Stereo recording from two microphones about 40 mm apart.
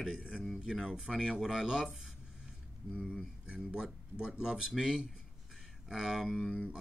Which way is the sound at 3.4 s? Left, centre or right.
Right.